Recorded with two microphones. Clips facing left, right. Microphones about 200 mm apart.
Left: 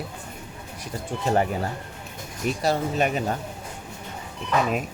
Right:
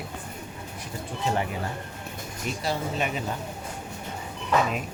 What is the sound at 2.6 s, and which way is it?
Speech, 45° left (ahead or behind).